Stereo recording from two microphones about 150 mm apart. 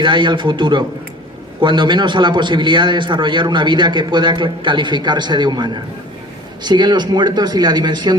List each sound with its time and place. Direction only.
0.0 s a man's voice: 30° right (ahead or behind)